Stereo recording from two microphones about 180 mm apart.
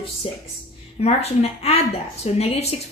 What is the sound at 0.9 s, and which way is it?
A woman's voice, 35° left (ahead or behind).